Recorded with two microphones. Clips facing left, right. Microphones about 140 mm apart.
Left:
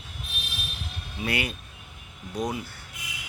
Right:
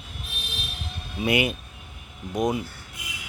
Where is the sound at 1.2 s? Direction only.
20° right (ahead or behind).